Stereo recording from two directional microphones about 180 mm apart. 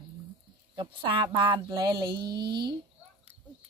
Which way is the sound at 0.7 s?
25° right (ahead or behind).